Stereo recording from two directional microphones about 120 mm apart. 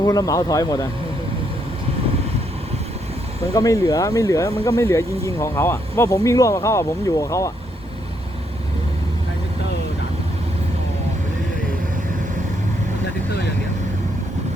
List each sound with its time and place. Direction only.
0.0 s speech: 30° left (ahead or behind)
3.5 s speech: 30° left (ahead or behind)